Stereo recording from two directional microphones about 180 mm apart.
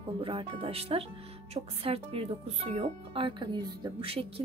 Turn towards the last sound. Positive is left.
turn(degrees=-30)  # may be behind; listen again after turning